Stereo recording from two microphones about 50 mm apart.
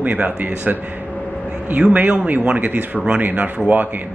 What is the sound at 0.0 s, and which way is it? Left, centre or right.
A man's voice, right.